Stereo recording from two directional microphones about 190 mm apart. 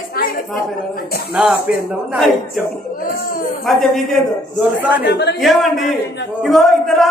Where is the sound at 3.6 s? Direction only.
Centre (ahead or behind).